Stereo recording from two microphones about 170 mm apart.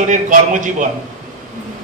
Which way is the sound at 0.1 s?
50° right (ahead or behind).